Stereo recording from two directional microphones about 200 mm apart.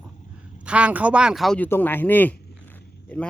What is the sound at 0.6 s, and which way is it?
Speech, 5° right (ahead or behind).